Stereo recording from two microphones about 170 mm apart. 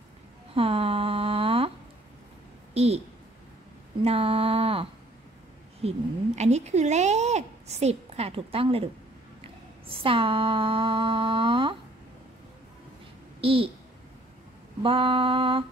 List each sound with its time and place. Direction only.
0.6 s a sound: 35° right (ahead or behind)
2.7 s a woman's voice: 35° right (ahead or behind)
4.0 s speech: 35° right (ahead or behind)
9.4 s a sound: 35° right (ahead or behind)
13.4 s a woman's voice: 35° right (ahead or behind)
14.8 s speech: 30° right (ahead or behind)